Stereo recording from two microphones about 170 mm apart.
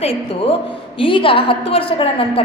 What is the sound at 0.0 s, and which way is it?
A woman's voice, 35° left (ahead or behind).